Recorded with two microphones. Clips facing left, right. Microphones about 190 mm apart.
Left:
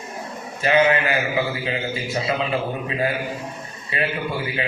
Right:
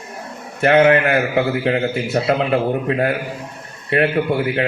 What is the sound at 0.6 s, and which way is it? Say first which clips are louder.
A man's voice: right 6 dB; 60° right (ahead or behind).